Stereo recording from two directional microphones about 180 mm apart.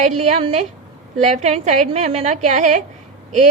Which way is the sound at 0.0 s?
35° right (ahead or behind).